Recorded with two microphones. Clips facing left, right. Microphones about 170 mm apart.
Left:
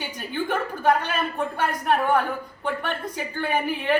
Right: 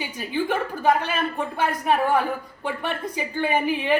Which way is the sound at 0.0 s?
Centre (ahead or behind).